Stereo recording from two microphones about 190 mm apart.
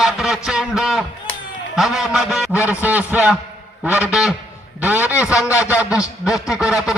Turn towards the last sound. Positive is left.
turn(degrees=-5)  # may be behind; listen again after turning